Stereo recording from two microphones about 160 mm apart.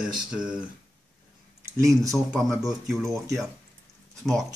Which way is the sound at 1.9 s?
20° right (ahead or behind).